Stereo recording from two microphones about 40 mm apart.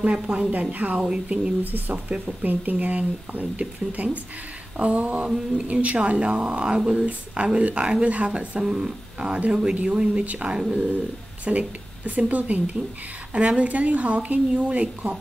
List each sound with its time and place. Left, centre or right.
0.0 s speech: right
1.0 s speech: right
1.6 s speech: right